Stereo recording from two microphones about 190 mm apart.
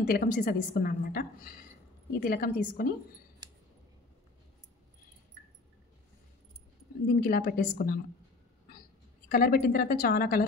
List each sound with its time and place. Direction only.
0.0 s a woman's voice: 50° left (ahead or behind)
7.1 s a woman's voice: 50° left (ahead or behind)
9.3 s a woman's voice: 50° left (ahead or behind)